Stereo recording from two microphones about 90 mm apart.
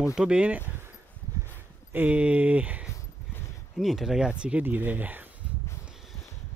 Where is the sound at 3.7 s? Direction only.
5° right (ahead or behind); by 5.2 s 20° right (ahead or behind).